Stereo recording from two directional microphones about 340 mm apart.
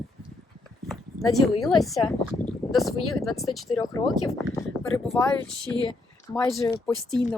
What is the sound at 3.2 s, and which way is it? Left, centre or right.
Speech, centre.